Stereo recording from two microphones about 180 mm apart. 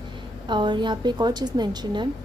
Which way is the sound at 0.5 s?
25° right (ahead or behind).